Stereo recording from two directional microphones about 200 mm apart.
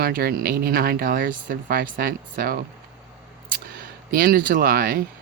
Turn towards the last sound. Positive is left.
turn(degrees=-45)  # may be behind; listen again after turning